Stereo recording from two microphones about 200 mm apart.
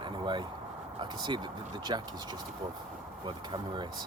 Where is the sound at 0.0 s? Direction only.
25° right (ahead or behind).